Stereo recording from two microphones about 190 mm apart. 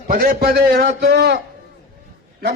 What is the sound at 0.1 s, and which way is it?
A man's voice, 50° right (ahead or behind).